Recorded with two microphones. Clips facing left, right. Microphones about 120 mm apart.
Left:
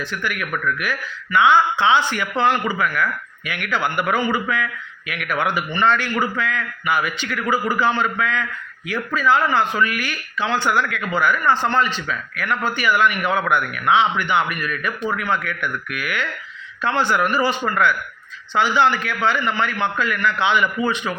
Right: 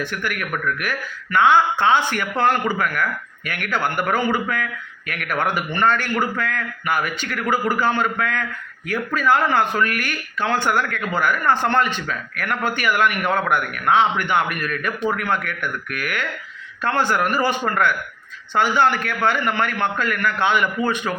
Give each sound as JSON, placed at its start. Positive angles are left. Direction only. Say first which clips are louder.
{"t": 0.0, "sound": "speech", "louder": "even", "side_deg": -50}